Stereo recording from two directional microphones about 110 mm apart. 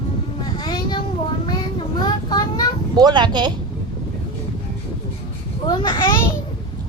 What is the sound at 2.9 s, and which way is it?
Speech, 40° right (ahead or behind).